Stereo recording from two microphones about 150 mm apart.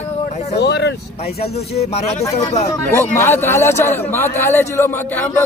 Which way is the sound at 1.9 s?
45° left (ahead or behind).